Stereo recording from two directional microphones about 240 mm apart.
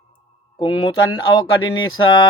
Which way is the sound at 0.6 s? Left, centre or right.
Centre.